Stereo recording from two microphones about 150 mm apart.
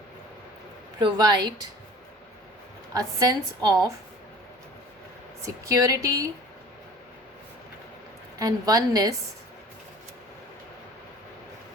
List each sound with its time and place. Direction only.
0.9 s a woman's voice: 30° right (ahead or behind)
2.9 s a woman's voice: 20° right (ahead or behind)
5.5 s a woman's voice: 20° right (ahead or behind)
8.4 s a woman's voice: 25° right (ahead or behind)